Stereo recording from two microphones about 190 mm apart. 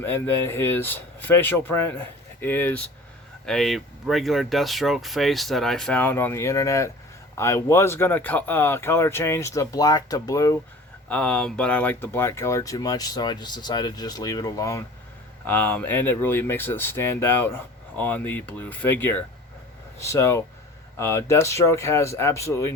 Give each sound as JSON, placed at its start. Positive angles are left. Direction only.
{"t": 0.0, "sound": "speech", "side_deg": 10}
{"t": 11.1, "sound": "speech", "side_deg": 5}